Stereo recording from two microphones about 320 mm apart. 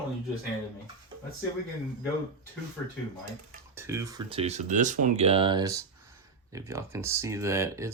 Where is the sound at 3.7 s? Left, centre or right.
Centre.